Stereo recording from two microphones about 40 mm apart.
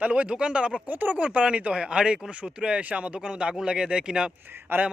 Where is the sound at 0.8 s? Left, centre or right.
Right.